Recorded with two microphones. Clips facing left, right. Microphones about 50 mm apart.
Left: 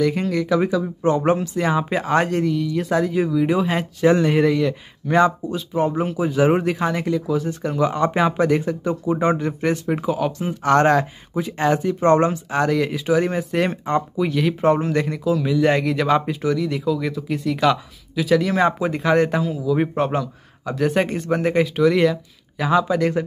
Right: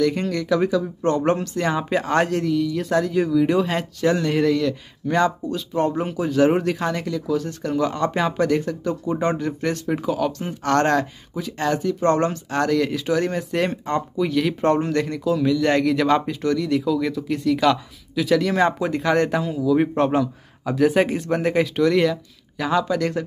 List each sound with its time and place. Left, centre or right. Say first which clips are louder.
0.0 s speech: left 1 dB; centre
4.0 s speech: left 4 dB; left
11.3 s speech: left 3 dB; left
12.3 s speech: left 1 dB; centre